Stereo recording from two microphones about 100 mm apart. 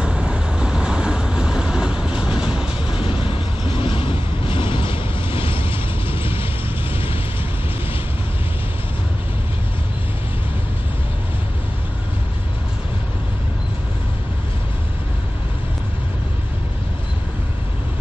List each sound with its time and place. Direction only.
0.0 s vehicle: 10° right (ahead or behind)
2.9 s vehicle: 65° left (ahead or behind)